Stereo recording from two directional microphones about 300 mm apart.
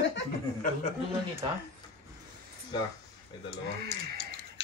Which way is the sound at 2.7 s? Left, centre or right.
Centre.